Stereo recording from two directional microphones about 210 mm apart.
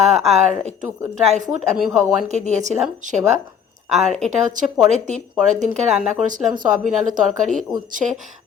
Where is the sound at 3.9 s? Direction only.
Centre (ahead or behind).